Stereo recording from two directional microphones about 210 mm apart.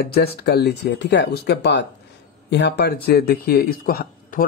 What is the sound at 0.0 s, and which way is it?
Speech, 50° left (ahead or behind).